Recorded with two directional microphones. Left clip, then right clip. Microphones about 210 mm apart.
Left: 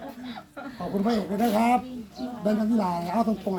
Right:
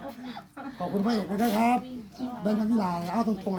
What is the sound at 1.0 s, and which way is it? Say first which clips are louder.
Speech: left 4 dB; 10° right (ahead or behind).